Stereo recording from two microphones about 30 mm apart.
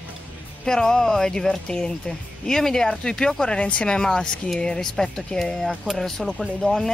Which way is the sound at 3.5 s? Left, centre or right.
Left.